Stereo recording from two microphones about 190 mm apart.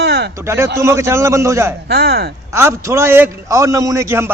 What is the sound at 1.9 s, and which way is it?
Speech, 55° right (ahead or behind).